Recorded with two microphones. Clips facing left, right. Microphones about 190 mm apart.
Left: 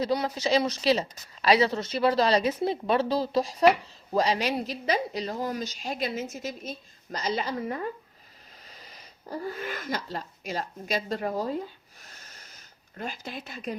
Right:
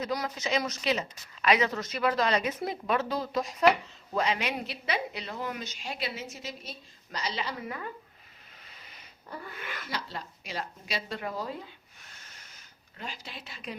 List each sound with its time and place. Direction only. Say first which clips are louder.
0.0 s a woman's voice: left 6 dB; 30° left (ahead or behind)
13.0 s a woman's voice: left 6 dB; 45° left (ahead or behind)